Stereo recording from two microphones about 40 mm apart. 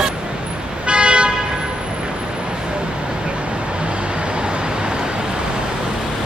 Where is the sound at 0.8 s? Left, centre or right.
Right.